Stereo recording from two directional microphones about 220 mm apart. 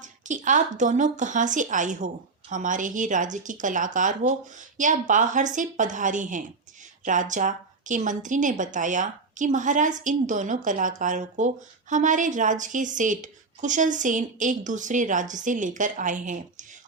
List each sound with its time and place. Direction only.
0.0 s a woman's voice: 35° right (ahead or behind)